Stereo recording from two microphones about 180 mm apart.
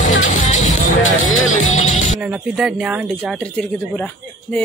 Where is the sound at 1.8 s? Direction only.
40° left (ahead or behind).